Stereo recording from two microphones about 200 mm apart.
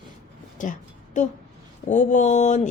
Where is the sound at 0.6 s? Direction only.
40° left (ahead or behind).